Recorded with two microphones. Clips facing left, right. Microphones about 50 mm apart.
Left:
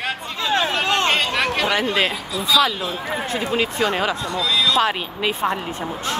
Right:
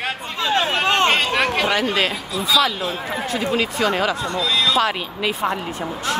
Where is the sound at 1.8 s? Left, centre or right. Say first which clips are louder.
Even; left.